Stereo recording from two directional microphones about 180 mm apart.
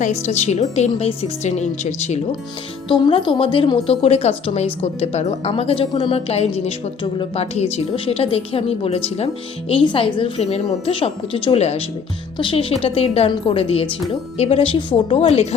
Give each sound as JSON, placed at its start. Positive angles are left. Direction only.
{"t": 0.0, "sound": "a woman's voice", "side_deg": 40}
{"t": 2.9, "sound": "a woman's voice", "side_deg": 30}